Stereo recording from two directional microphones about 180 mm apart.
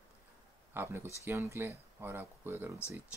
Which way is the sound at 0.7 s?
15° right (ahead or behind).